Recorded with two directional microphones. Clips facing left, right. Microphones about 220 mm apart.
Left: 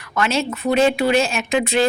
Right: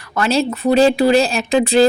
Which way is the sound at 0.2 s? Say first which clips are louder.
Right 4 dB; 35° right (ahead or behind).